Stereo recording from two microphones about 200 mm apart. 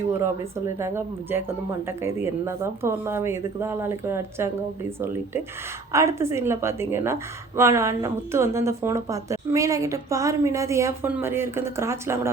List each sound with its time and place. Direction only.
0.8 s a woman's voice: 10° right (ahead or behind)
5.9 s a woman's voice: 15° right (ahead or behind)